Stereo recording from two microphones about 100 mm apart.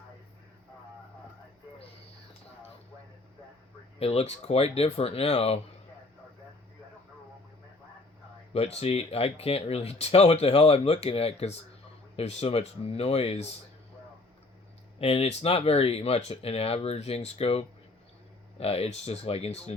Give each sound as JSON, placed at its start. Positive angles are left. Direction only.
{"t": 3.9, "sound": "speech", "side_deg": 85}
{"t": 8.5, "sound": "speech", "side_deg": 90}
{"t": 14.9, "sound": "speech", "side_deg": 80}